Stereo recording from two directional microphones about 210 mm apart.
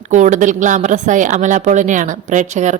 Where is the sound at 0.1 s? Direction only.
35° right (ahead or behind).